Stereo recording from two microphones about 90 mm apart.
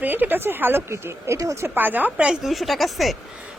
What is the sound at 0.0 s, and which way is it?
Speech, 20° right (ahead or behind).